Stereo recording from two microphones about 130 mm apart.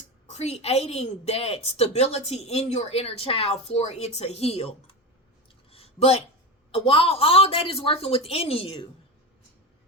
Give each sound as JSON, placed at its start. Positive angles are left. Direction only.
{"t": 0.3, "sound": "a woman's voice", "side_deg": 55}
{"t": 5.7, "sound": "a sound", "side_deg": 50}
{"t": 6.7, "sound": "a woman's voice", "side_deg": 45}